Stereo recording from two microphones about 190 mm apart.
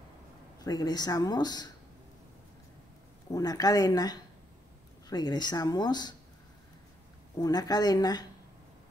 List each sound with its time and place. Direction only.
0.7 s speech: 20° left (ahead or behind)
3.3 s speech: 20° left (ahead or behind)
7.3 s speech: 20° left (ahead or behind)